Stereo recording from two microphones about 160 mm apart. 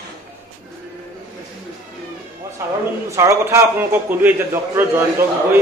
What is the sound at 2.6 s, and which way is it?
A man's voice, 15° right (ahead or behind).